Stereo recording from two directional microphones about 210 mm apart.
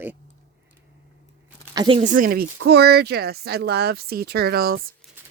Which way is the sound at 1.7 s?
20° right (ahead or behind).